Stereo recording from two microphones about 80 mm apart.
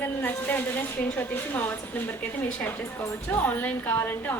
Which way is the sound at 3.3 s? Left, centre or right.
Left.